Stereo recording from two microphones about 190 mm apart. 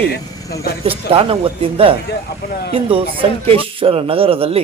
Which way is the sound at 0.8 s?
30° right (ahead or behind).